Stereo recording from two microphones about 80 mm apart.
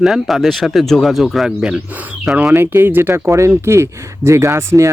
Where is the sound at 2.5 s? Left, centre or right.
Right.